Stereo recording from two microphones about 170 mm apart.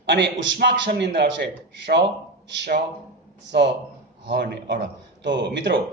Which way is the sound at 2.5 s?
90° right.